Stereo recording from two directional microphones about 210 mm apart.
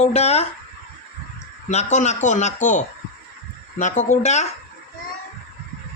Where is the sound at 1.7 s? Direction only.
35° left (ahead or behind).